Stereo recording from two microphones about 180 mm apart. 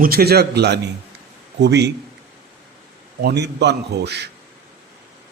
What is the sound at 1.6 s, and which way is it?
Mantra, 70° right (ahead or behind).